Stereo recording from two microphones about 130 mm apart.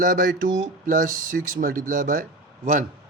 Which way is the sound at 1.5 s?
90° right.